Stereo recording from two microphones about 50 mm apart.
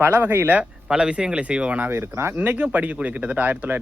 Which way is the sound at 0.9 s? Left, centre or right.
Centre.